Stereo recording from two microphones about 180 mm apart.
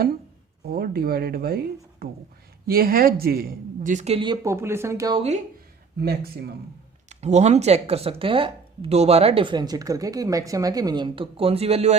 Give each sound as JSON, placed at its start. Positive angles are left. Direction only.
{"t": 0.7, "sound": "speech", "side_deg": -60}
{"t": 4.4, "sound": "speech", "side_deg": -15}
{"t": 6.0, "sound": "speech", "side_deg": -65}
{"t": 7.1, "sound": "speech", "side_deg": -40}